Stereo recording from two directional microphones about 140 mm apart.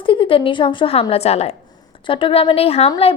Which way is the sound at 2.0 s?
40° left (ahead or behind).